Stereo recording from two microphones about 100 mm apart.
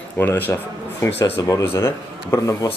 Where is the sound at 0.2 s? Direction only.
20° left (ahead or behind).